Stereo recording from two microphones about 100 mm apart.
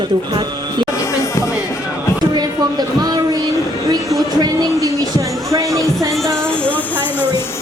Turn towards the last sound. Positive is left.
turn(degrees=-30)  # may be behind; listen again after turning